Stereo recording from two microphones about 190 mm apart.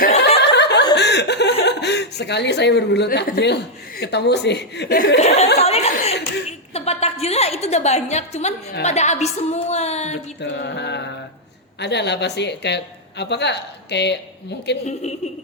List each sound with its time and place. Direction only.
0.3 s snicker: 65° left (ahead or behind)
0.9 s chuckle: 65° left (ahead or behind)
1.6 s speech: 65° left (ahead or behind)
5.2 s a woman's voice: 35° left (ahead or behind)
5.5 s a sound: 35° left (ahead or behind)
6.7 s a woman's voice: 35° left (ahead or behind)
10.4 s speech: 65° left (ahead or behind)